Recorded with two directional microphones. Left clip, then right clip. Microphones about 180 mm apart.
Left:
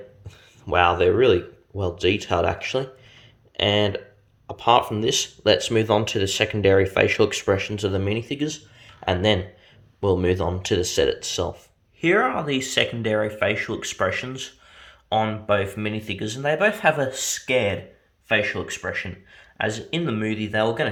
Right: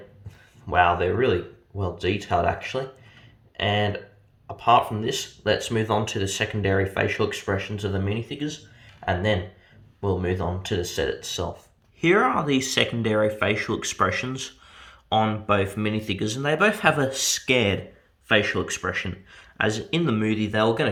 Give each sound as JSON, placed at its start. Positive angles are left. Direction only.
{"t": 0.7, "sound": "speech", "side_deg": 55}
{"t": 4.4, "sound": "speech", "side_deg": 55}
{"t": 10.0, "sound": "speech", "side_deg": 60}
{"t": 11.9, "sound": "speech", "side_deg": 5}